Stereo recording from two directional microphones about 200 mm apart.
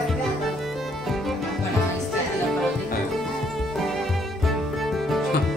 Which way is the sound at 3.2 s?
Centre (ahead or behind).